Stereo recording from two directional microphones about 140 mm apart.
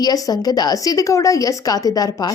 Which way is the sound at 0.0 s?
25° left (ahead or behind).